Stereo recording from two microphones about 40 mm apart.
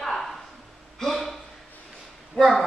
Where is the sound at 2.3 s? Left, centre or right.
Left.